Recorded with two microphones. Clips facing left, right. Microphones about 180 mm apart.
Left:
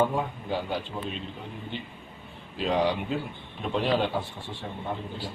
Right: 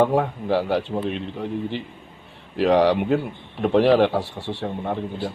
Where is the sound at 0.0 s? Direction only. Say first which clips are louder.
Right 7 dB; 75° right (ahead or behind).